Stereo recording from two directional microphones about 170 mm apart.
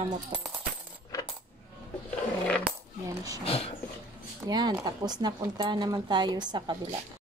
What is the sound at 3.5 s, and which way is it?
Dog, 35° left (ahead or behind).